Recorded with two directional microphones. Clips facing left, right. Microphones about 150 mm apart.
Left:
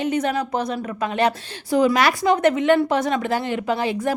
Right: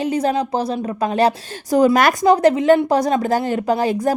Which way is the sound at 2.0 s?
50° right (ahead or behind).